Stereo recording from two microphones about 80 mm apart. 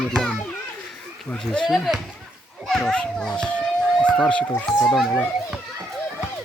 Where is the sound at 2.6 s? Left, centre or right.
Centre.